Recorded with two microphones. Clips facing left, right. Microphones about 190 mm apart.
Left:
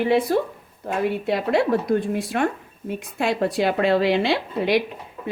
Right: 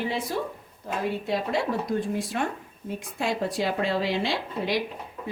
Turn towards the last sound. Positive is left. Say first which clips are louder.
# left 6 dB
turn(degrees=65)  # may be behind; listen again after turning